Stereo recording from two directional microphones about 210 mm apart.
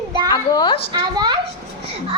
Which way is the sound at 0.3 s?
20° left (ahead or behind).